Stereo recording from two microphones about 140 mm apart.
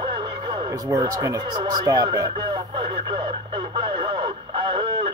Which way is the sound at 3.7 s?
35° right (ahead or behind).